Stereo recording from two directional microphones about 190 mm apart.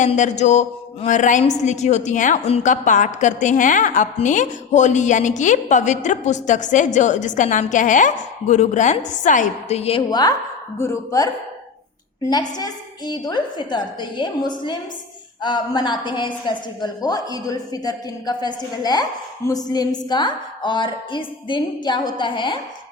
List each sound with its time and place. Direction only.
0.0 s a woman's voice: 40° left (ahead or behind)